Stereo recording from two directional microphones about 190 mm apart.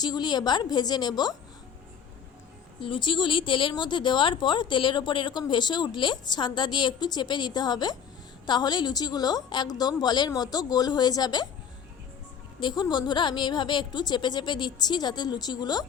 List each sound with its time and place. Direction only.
0.0 s a woman's voice: 20° left (ahead or behind)
2.8 s a woman's voice: 25° left (ahead or behind)
12.5 s a woman's voice: 25° left (ahead or behind)